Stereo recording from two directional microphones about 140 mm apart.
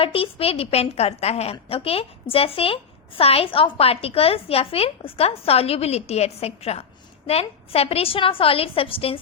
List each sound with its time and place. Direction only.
0.0 s a woman's voice: 40° left (ahead or behind)